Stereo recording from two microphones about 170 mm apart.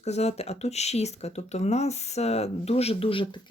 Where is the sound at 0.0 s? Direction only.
40° left (ahead or behind).